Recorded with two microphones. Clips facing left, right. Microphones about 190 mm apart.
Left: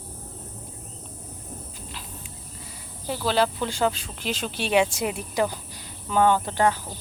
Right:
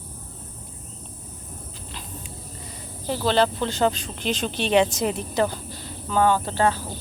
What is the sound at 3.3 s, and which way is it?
Speech, 10° left (ahead or behind).